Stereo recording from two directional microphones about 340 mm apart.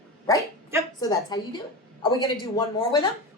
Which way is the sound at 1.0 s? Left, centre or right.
Centre.